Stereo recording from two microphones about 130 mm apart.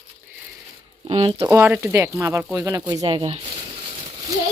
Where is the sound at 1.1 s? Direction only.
40° right (ahead or behind).